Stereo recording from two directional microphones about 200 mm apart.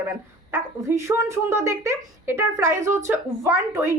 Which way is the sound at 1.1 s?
15° right (ahead or behind).